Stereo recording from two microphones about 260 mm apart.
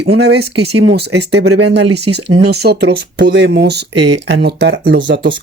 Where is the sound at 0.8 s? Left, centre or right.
Right.